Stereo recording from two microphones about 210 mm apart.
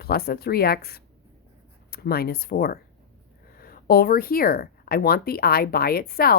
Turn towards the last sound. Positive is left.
turn(degrees=45)  # may be behind; listen again after turning